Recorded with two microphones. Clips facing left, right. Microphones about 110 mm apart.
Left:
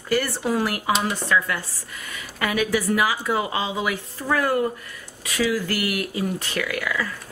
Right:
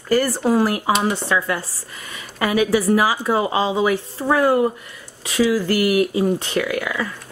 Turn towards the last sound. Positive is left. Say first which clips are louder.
# right 3 dB
turn(degrees=-25)  # may be behind; listen again after turning